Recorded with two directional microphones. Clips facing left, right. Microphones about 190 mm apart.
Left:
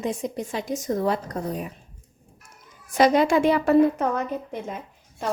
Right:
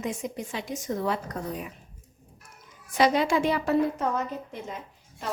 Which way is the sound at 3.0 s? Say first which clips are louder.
Left 4 dB; 45° left (ahead or behind).